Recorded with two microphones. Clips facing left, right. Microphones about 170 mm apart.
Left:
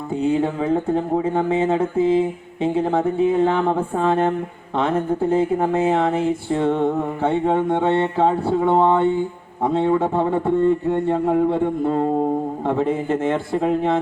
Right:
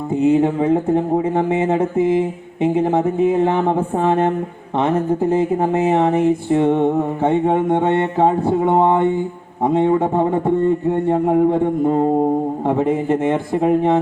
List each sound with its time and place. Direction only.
0.1 s speech: 20° right (ahead or behind)